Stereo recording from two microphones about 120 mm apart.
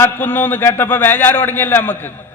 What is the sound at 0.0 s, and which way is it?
A man's voice, 20° left (ahead or behind).